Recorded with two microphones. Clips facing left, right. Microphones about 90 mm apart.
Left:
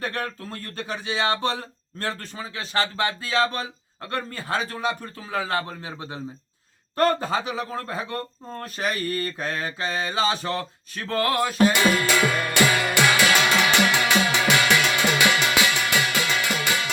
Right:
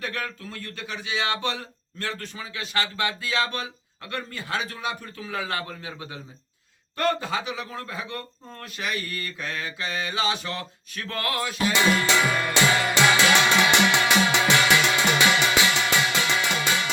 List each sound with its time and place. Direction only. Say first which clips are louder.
0.0 s speech: left 3 dB; 35° left (ahead or behind)
11.9 s music: left 1 dB; 20° right (ahead or behind)